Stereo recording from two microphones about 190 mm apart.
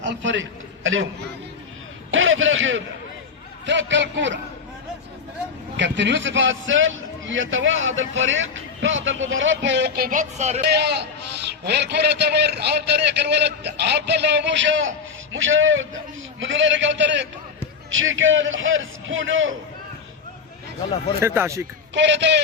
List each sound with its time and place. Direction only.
0.0 s a man's voice: 75° right (ahead or behind)
2.0 s a man's voice: 90° right
3.7 s a man's voice: 75° right (ahead or behind)
5.7 s a man's voice: 70° right (ahead or behind); by 10.6 s 35° right (ahead or behind)
10.6 s a man's voice: 60° right (ahead or behind)
17.9 s a man's voice: 90° right
21.2 s speech: 15° right (ahead or behind)
21.9 s a man's voice: 70° right (ahead or behind)